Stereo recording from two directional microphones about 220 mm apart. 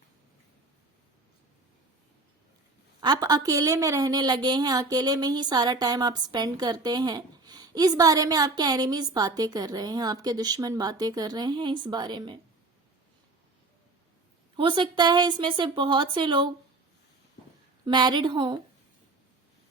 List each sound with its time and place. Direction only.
3.0 s a woman's voice: 20° right (ahead or behind)
14.5 s a woman's voice: 20° right (ahead or behind)
17.8 s a woman's voice: 20° right (ahead or behind)